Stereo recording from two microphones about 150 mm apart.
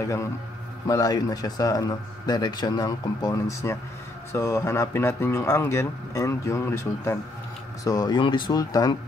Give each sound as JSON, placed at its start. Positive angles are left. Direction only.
{"t": 0.0, "sound": "speech", "side_deg": 20}